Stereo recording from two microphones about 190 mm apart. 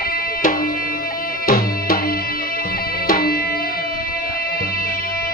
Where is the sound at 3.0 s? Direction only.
50° left (ahead or behind).